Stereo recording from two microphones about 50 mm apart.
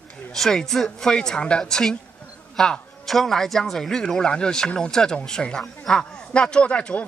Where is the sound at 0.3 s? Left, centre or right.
Centre.